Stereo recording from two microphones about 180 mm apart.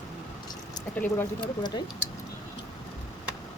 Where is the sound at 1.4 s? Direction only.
25° left (ahead or behind).